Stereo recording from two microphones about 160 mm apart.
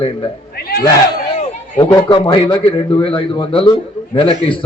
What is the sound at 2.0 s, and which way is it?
A man's voice, 30° left (ahead or behind).